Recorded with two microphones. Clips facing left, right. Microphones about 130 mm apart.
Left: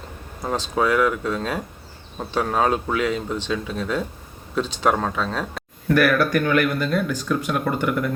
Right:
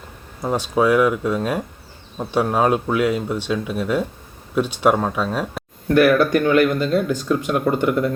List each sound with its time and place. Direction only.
0.4 s speech: 10° right (ahead or behind)
6.1 s speech: 25° right (ahead or behind)
7.3 s speech: 20° right (ahead or behind)